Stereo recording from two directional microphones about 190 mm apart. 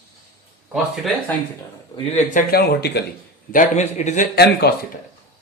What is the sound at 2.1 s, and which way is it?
Speech, 50° left (ahead or behind).